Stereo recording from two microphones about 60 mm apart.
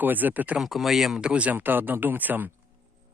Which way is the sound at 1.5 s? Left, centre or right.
Right.